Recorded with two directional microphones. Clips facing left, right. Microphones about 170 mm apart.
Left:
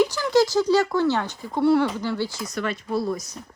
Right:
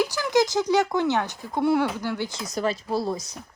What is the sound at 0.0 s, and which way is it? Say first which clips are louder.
Speech: left 3 dB; 10° right (ahead or behind).